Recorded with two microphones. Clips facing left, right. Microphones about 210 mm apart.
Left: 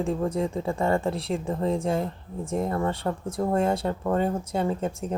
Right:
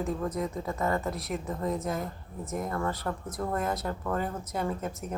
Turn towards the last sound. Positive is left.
turn(degrees=30)  # may be behind; listen again after turning